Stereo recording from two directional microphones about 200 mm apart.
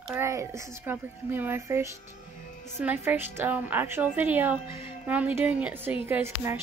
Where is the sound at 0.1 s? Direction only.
15° right (ahead or behind).